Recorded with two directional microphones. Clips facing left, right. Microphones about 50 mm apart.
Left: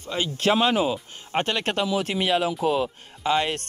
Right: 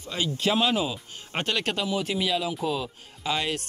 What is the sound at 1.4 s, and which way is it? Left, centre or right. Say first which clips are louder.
Speech: left 3 dB; left.